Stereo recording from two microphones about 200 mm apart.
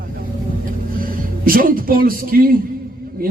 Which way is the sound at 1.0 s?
45° right (ahead or behind).